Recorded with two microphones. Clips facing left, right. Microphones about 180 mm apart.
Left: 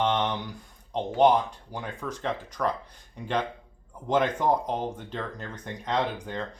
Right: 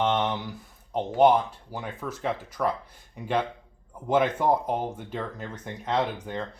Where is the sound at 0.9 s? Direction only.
5° right (ahead or behind).